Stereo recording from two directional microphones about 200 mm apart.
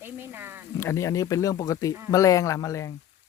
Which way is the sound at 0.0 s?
10° right (ahead or behind).